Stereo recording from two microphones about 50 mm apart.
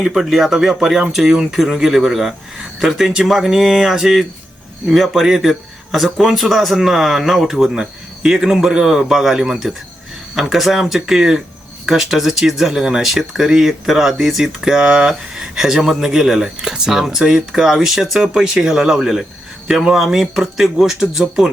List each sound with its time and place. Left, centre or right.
0.0 s speech: centre